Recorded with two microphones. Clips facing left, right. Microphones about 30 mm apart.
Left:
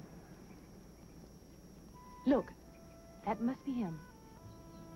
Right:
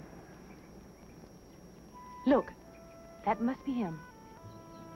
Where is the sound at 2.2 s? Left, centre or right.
Right.